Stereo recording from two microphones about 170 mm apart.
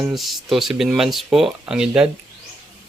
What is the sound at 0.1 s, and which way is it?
Speech, centre (ahead or behind).